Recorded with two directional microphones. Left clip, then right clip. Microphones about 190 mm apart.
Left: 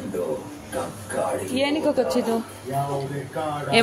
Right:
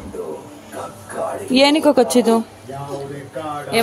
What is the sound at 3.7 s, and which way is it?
Speech, centre (ahead or behind).